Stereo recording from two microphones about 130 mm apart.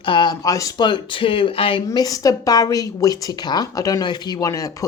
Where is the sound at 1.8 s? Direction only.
30° left (ahead or behind).